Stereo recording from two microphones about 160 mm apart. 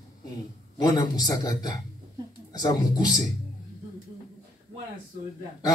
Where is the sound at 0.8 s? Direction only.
25° left (ahead or behind).